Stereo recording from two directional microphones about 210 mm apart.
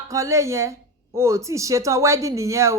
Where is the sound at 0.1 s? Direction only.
15° right (ahead or behind).